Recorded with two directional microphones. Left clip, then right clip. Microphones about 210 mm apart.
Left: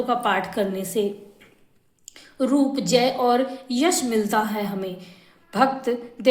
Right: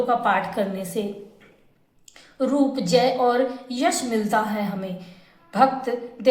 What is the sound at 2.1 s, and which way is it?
A woman's voice, 45° left (ahead or behind).